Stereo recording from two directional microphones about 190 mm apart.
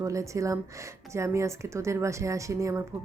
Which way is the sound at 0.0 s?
15° right (ahead or behind).